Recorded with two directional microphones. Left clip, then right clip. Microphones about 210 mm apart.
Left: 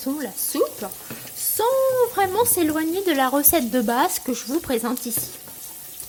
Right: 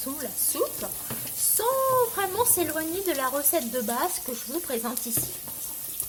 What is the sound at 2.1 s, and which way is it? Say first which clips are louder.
Speech: left 6 dB; 40° left (ahead or behind).